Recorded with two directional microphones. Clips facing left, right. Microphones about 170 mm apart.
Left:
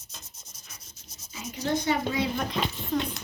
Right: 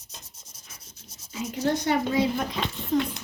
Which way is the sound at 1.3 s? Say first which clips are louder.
Right 3 dB; 65° right (ahead or behind).